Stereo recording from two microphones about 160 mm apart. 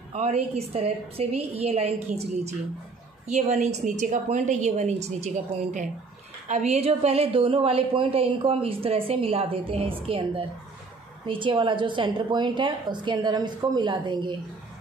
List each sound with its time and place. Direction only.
0.1 s a woman's voice: 40° right (ahead or behind)